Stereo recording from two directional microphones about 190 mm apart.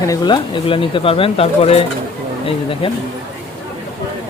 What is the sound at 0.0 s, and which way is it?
Speech, 20° left (ahead or behind).